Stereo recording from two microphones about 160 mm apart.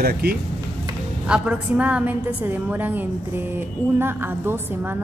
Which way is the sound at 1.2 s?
5° right (ahead or behind).